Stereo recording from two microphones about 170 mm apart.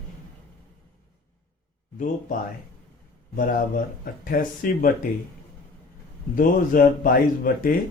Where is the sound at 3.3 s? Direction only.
55° left (ahead or behind).